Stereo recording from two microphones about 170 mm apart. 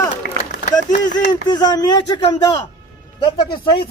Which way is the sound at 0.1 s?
45° left (ahead or behind).